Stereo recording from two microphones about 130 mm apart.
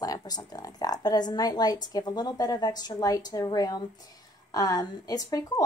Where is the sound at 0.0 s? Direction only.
30° left (ahead or behind).